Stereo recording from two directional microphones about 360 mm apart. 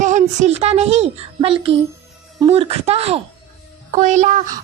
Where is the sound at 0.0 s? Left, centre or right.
Centre.